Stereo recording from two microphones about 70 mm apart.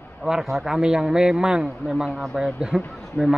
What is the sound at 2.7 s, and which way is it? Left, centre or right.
Speech, centre.